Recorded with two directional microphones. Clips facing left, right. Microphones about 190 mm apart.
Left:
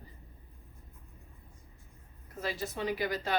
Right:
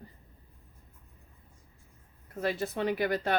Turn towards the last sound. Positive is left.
turn(degrees=-55)  # may be behind; listen again after turning